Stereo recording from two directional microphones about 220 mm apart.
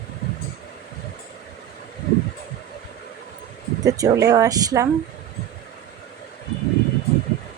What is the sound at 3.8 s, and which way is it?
Speech, 15° right (ahead or behind).